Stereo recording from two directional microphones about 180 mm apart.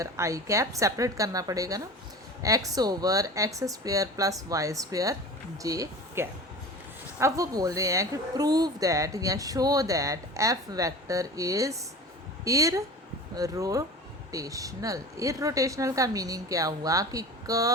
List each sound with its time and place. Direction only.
0.0 s a woman's voice: 15° right (ahead or behind)